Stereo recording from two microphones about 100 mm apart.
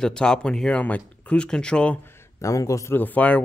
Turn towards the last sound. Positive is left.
turn(degrees=15)  # may be behind; listen again after turning